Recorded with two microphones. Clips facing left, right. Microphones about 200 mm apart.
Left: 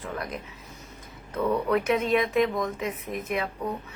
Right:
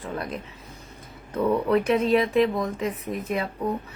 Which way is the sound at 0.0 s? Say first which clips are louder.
Right 2 dB; 30° right (ahead or behind).